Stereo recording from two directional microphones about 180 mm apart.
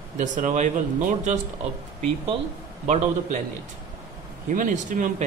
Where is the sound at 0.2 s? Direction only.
45° right (ahead or behind).